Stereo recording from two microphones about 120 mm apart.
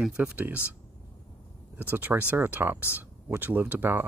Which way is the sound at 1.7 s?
15° right (ahead or behind).